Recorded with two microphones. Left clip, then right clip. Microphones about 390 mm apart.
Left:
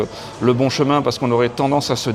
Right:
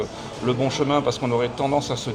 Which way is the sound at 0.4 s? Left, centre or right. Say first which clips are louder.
Left 6 dB; left.